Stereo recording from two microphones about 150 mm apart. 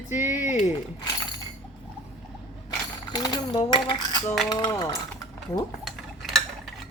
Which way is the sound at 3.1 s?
25° left (ahead or behind).